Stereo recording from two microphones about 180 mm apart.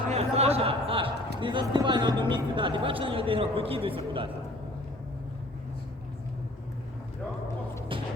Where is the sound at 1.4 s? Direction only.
25° right (ahead or behind).